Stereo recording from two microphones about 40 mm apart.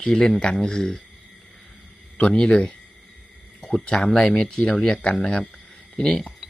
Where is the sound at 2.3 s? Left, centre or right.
Left.